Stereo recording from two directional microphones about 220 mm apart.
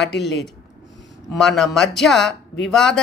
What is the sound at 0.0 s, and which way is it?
Speech, 50° left (ahead or behind).